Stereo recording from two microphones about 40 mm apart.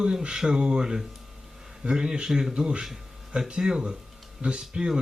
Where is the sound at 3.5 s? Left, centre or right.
Centre.